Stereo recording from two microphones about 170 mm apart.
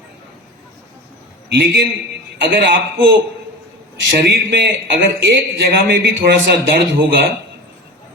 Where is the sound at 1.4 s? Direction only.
75° right (ahead or behind).